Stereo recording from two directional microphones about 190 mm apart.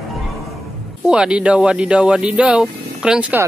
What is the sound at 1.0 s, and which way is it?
Speech, 5° right (ahead or behind).